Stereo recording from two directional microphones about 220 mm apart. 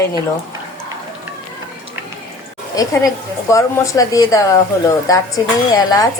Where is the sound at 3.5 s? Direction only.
15° left (ahead or behind).